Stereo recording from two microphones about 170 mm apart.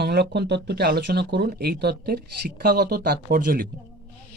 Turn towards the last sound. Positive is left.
turn(degrees=-55)  # may be behind; listen again after turning